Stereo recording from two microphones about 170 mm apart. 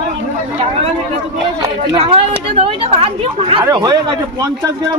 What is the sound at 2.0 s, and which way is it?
Speech, 35° right (ahead or behind).